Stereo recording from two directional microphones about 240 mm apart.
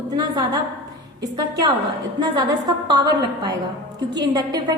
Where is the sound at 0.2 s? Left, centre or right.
Centre.